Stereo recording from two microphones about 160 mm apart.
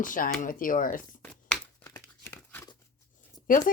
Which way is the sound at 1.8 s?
15° left (ahead or behind).